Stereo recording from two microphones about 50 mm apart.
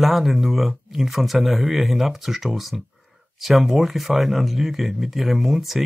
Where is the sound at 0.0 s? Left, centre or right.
Centre.